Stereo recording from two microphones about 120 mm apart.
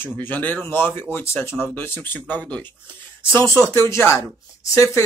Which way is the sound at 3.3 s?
25° left (ahead or behind).